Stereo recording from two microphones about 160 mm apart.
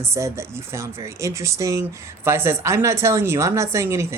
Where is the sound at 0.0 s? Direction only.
15° right (ahead or behind).